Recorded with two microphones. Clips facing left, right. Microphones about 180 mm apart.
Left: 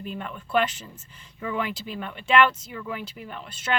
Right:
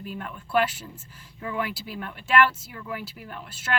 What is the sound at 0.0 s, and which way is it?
Speech, 5° right (ahead or behind).